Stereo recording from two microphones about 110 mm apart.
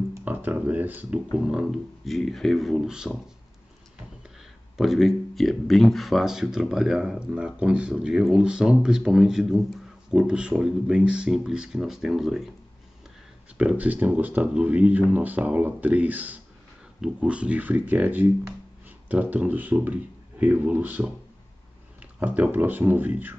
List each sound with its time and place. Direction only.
0.2 s a sound: 15° right (ahead or behind)
1.3 s speech: 5° right (ahead or behind)
4.7 s speech: centre (ahead or behind)
13.6 s speech: 10° right (ahead or behind)
22.0 s speech: 15° right (ahead or behind)